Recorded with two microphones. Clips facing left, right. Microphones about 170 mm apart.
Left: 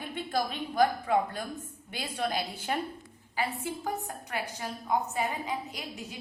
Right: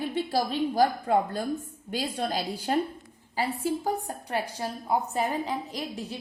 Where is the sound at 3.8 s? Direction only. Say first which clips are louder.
Right 5 dB; 35° right (ahead or behind).